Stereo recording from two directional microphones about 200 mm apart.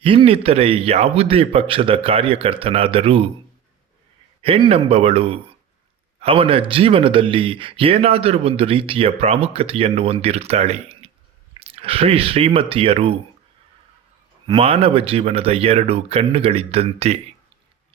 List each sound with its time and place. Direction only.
0.0 s speech: 25° right (ahead or behind)
4.4 s speech: 25° right (ahead or behind)
14.4 s speech: 30° right (ahead or behind)